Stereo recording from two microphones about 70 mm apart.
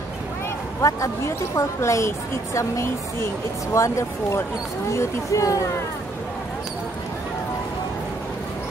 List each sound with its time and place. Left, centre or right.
0.7 s a woman's voice: left